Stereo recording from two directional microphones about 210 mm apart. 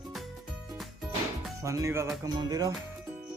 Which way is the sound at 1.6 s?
15° right (ahead or behind).